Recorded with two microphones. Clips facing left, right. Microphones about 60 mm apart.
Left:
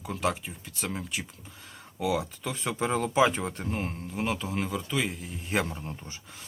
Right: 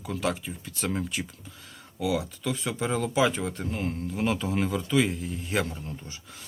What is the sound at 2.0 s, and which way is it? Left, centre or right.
Speech, left.